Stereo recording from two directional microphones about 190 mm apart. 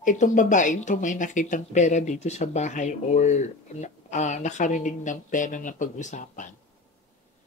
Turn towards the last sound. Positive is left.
turn(degrees=40)  # may be behind; listen again after turning